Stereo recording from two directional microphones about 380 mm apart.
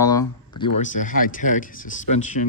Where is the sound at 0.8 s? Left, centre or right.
Centre.